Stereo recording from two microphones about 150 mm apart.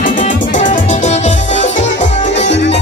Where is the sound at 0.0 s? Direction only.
60° left (ahead or behind).